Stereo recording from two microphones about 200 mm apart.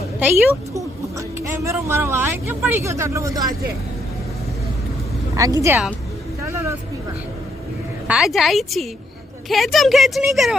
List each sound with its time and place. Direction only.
0.2 s speech: 10° right (ahead or behind)
5.4 s speech: 15° right (ahead or behind)
6.5 s vehicle: 15° right (ahead or behind)
8.0 s speech: 5° right (ahead or behind)